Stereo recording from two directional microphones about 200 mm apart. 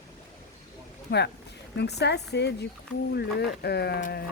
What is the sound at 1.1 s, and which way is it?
Speech, 55° left (ahead or behind).